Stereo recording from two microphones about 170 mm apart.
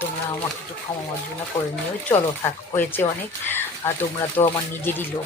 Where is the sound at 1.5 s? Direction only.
15° left (ahead or behind).